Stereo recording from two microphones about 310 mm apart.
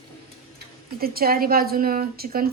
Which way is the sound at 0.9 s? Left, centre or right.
Right.